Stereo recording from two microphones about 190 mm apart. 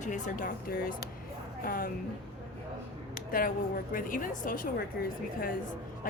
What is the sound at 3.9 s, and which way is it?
A woman's voice, 45° left (ahead or behind).